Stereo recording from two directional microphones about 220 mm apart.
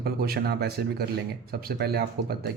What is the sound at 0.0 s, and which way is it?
Speech, 45° right (ahead or behind).